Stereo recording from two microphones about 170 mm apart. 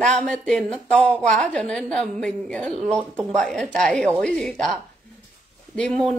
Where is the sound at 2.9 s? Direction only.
15° right (ahead or behind).